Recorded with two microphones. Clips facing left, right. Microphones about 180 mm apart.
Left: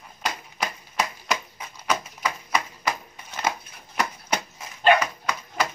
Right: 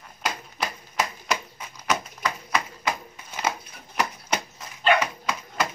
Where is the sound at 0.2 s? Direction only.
5° right (ahead or behind).